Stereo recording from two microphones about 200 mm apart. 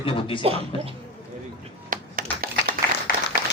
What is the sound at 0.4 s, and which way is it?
Speech, 30° right (ahead or behind).